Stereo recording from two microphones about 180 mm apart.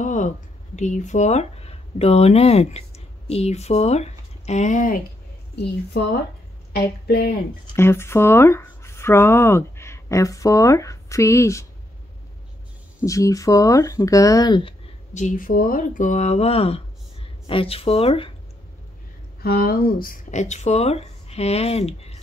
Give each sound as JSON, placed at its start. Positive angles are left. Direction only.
{"t": 0.0, "sound": "a sound", "side_deg": 45}
{"t": 0.7, "sound": "speech", "side_deg": 40}
{"t": 5.9, "sound": "a woman's voice", "side_deg": 70}
{"t": 7.6, "sound": "speech", "side_deg": 15}
{"t": 13.0, "sound": "speech", "side_deg": 20}
{"t": 15.1, "sound": "speech", "side_deg": 45}
{"t": 19.4, "sound": "speech", "side_deg": 55}